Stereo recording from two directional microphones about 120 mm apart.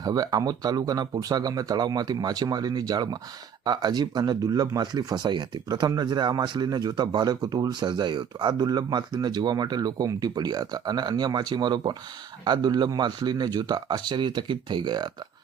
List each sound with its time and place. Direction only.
0.0 s speech: 35° right (ahead or behind)